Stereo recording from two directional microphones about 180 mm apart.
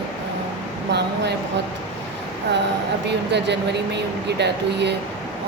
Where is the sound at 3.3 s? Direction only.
70° right (ahead or behind).